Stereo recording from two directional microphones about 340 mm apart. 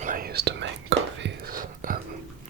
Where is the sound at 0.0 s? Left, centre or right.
Right.